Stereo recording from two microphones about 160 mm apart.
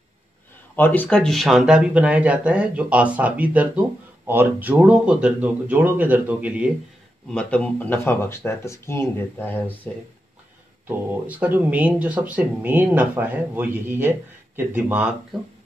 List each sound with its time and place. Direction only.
0.7 s speech: 10° left (ahead or behind); by 6.7 s 10° right (ahead or behind)
7.2 s speech: 5° left (ahead or behind)
10.9 s speech: 10° right (ahead or behind)